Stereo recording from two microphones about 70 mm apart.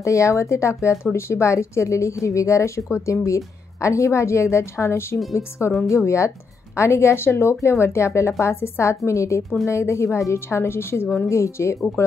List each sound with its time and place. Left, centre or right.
0.0 s speech: left